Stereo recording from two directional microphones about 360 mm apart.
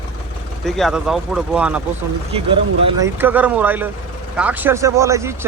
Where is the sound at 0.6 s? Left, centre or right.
Centre.